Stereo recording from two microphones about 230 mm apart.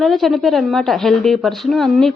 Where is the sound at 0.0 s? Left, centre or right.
Centre.